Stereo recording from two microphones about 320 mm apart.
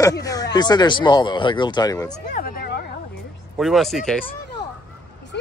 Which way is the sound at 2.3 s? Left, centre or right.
Left.